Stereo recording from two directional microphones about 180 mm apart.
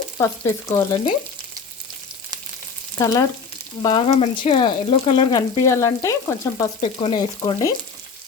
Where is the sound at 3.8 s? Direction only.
30° left (ahead or behind).